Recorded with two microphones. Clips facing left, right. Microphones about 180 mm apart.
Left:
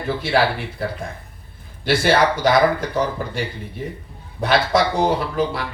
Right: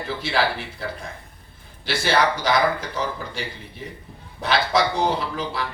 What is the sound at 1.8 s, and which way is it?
Speech, 55° left (ahead or behind).